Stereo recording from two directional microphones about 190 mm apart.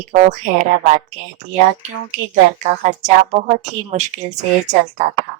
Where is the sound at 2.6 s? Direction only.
40° right (ahead or behind).